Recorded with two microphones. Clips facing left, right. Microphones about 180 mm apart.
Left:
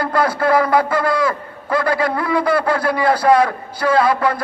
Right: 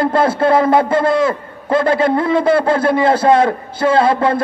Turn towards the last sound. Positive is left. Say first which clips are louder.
# right 3 dB
turn(degrees=-25)  # may be behind; listen again after turning